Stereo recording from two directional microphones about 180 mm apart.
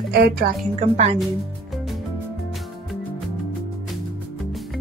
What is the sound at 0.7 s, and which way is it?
Speech, 35° right (ahead or behind).